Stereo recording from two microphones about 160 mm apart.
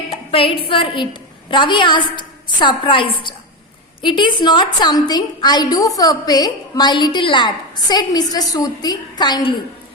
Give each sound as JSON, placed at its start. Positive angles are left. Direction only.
{"t": 0.3, "sound": "a woman's voice", "side_deg": 35}